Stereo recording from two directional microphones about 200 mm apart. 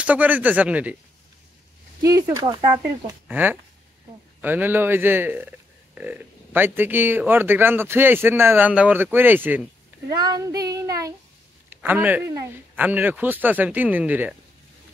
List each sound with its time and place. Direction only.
0.0 s speech: 10° right (ahead or behind)
2.0 s speech: 15° right (ahead or behind)